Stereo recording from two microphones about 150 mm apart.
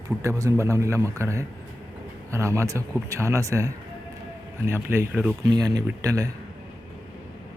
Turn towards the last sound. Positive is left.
turn(degrees=-20)  # may be behind; listen again after turning